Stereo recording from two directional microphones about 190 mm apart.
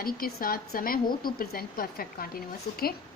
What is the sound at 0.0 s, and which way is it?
A woman's voice, 50° left (ahead or behind).